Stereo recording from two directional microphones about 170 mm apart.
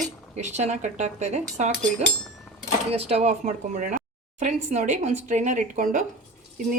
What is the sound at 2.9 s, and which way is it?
Speech, 35° right (ahead or behind).